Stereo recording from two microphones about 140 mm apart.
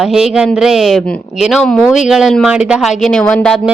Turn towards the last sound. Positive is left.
turn(degrees=10)  # may be behind; listen again after turning